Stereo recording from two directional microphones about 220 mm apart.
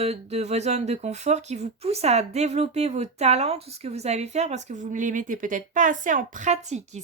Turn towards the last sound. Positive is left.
turn(degrees=-30)  # may be behind; listen again after turning